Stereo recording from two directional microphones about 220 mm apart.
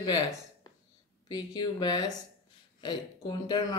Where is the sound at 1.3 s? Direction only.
20° left (ahead or behind).